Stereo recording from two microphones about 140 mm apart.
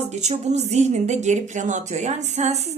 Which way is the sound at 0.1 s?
55° right (ahead or behind).